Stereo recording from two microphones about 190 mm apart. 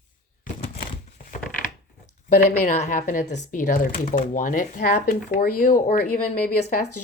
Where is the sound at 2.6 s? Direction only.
40° left (ahead or behind).